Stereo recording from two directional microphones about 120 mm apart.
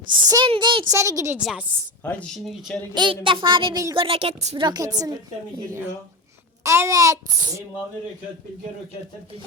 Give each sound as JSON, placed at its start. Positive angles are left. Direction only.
{"t": 0.1, "sound": "a woman's voice", "side_deg": -40}
{"t": 0.9, "sound": "a child's voice", "side_deg": -25}
{"t": 1.4, "sound": "speech", "side_deg": -5}
{"t": 2.0, "sound": "speech", "side_deg": 10}
{"t": 2.9, "sound": "a woman's voice", "side_deg": -40}
{"t": 4.5, "sound": "a woman's voice", "side_deg": -35}
{"t": 6.6, "sound": "a child's voice", "side_deg": -25}